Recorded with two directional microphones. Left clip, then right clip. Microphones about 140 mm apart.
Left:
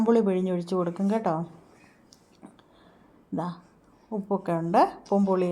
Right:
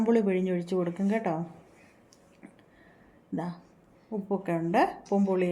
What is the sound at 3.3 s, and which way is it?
A woman's voice, 20° left (ahead or behind).